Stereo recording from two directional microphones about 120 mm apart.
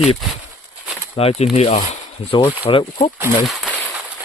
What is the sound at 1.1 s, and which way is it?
Speech, 55° left (ahead or behind).